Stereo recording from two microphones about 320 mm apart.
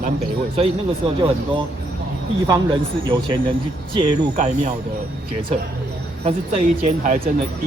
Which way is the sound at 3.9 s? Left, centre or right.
Right.